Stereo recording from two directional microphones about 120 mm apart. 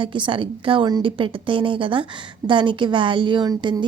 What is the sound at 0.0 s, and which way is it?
A woman's voice, 45° right (ahead or behind).